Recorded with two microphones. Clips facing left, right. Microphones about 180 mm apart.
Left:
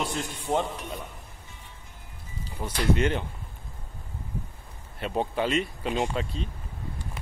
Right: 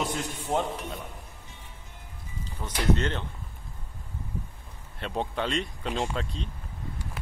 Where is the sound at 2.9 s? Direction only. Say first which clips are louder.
Left 2 dB; 10° left (ahead or behind).